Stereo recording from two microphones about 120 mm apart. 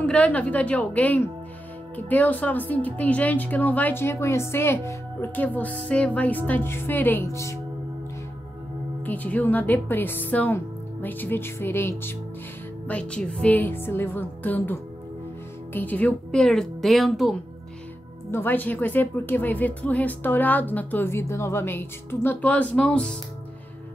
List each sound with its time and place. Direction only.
0.0 s speech: 10° left (ahead or behind)
9.0 s speech: 15° left (ahead or behind)
18.3 s speech: 15° left (ahead or behind)